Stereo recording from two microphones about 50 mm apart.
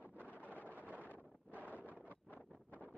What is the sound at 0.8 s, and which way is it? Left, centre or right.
Wind noise, right.